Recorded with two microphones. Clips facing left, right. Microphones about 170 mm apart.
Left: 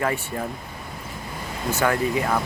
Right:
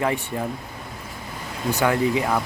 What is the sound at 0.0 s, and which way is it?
Speech, 15° right (ahead or behind).